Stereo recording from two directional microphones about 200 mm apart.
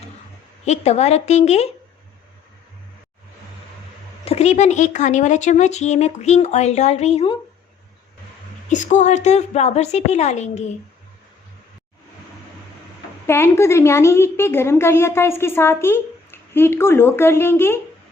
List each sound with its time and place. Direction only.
0.6 s speech: 35° left (ahead or behind)
4.3 s speech: 35° left (ahead or behind)
8.7 s speech: 40° left (ahead or behind)
13.2 s a woman's voice: 10° left (ahead or behind)